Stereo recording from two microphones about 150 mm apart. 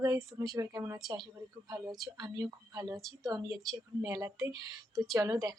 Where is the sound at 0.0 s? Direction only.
20° right (ahead or behind).